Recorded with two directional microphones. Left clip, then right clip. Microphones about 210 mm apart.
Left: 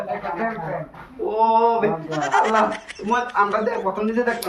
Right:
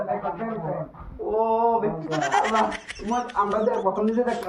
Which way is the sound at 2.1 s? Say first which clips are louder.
Left 3 dB; centre (ahead or behind).